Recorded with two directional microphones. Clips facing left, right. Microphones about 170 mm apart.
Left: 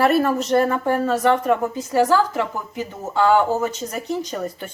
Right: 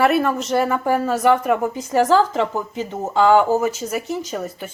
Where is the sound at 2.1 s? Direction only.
20° right (ahead or behind).